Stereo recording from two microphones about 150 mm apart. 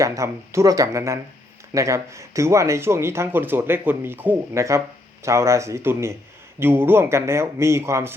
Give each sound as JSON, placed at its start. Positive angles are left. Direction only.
{"t": 0.0, "sound": "speech", "side_deg": -20}